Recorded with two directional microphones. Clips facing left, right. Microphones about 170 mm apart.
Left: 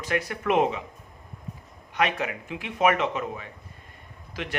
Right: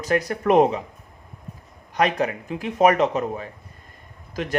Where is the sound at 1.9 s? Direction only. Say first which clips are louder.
Right 5 dB; 40° right (ahead or behind).